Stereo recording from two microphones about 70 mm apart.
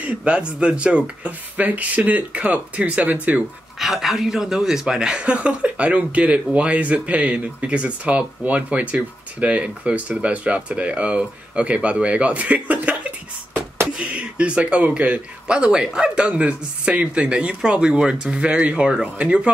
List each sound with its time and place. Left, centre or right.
0.0 s speech: centre
3.8 s speech: centre; by 13.8 s right
13.9 s speech: centre